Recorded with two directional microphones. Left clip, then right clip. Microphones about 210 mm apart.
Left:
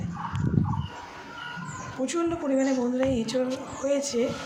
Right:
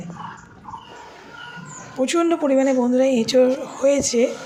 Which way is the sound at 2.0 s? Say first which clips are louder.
Right 9 dB; 40° right (ahead or behind).